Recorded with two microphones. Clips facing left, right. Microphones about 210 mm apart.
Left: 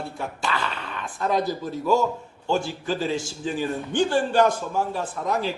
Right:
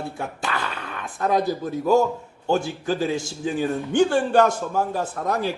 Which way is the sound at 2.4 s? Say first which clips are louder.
Right 2 dB; 50° right (ahead or behind).